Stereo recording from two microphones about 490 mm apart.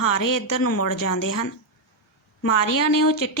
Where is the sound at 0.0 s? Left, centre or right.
Left.